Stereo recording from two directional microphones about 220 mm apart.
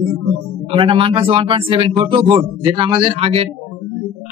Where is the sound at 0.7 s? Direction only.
25° right (ahead or behind).